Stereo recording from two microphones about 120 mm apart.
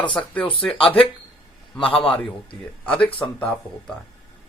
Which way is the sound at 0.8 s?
50° left (ahead or behind).